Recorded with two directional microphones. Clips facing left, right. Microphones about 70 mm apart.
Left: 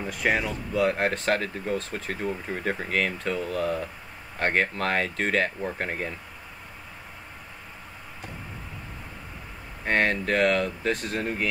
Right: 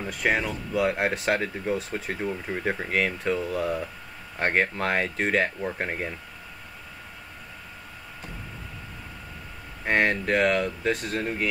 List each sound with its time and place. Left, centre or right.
0.0 s speech: centre
9.8 s speech: centre